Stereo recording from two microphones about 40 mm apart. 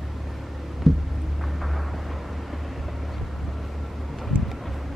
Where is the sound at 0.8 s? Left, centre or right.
Centre.